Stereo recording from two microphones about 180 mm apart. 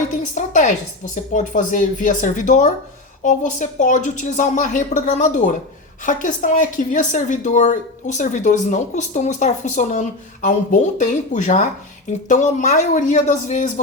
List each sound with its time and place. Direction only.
0.3 s speech: 45° left (ahead or behind)